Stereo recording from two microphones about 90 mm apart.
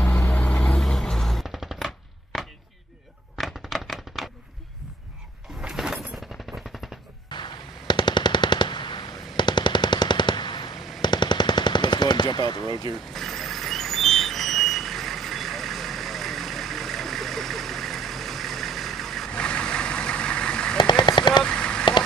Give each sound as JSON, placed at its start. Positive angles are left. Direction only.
{"t": 0.0, "sound": "vehicle", "side_deg": 30}
{"t": 0.3, "sound": "vehicle", "side_deg": 15}
{"t": 2.3, "sound": "chop", "side_deg": 0}
{"t": 3.3, "sound": "a sound", "side_deg": 0}
{"t": 5.6, "sound": "a sound", "side_deg": -5}
{"t": 7.2, "sound": "machine gun", "side_deg": 60}
{"t": 13.1, "sound": "vehicle", "side_deg": 5}
{"t": 20.7, "sound": "a sound", "side_deg": 55}
{"t": 21.5, "sound": "radio", "side_deg": 10}